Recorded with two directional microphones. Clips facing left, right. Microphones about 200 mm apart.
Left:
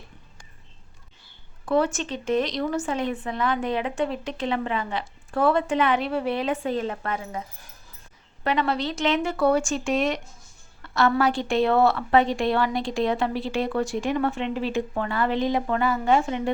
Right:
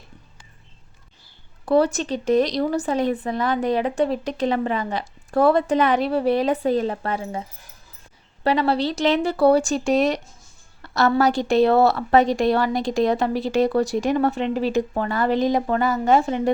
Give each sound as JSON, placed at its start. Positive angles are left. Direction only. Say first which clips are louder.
{"t": 1.6, "sound": "speech", "louder": "right 4 dB", "side_deg": -35}
{"t": 8.4, "sound": "speech", "louder": "right 5 dB", "side_deg": -35}